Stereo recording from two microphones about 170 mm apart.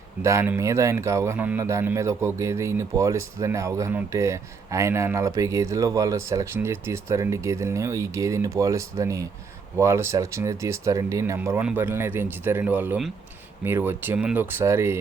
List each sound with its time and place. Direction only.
0.2 s speech: 15° right (ahead or behind)